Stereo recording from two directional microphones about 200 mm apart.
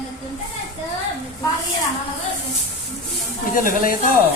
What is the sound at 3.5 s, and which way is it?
Speech, 45° left (ahead or behind).